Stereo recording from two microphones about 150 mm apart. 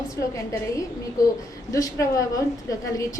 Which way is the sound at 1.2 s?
25° left (ahead or behind).